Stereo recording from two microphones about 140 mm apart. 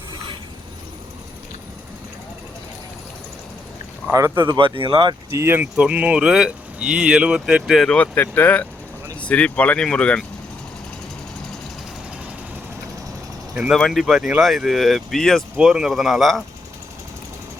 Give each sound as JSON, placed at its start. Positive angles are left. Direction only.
{"t": 4.1, "sound": "speech", "side_deg": -25}
{"t": 4.5, "sound": "speech", "side_deg": -40}
{"t": 5.3, "sound": "speech", "side_deg": -20}
{"t": 7.9, "sound": "speech", "side_deg": 15}
{"t": 13.5, "sound": "speech", "side_deg": -5}